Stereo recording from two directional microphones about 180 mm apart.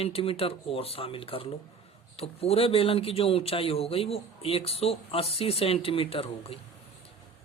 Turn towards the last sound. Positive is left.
turn(degrees=30)  # may be behind; listen again after turning